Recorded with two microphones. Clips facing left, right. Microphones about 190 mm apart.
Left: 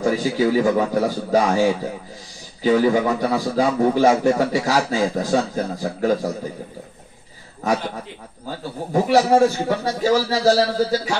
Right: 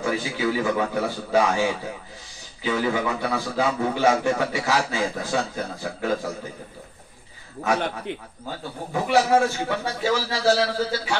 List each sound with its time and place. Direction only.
0.0 s a man's voice: 40° left (ahead or behind)
8.9 s a man's voice: 40° left (ahead or behind)